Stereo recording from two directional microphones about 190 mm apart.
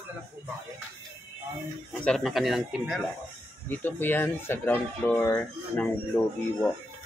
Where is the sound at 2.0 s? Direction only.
Centre (ahead or behind).